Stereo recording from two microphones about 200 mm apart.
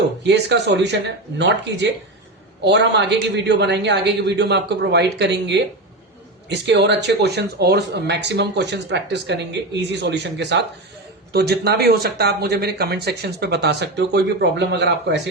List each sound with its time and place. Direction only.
0.2 s speech: 60° right (ahead or behind)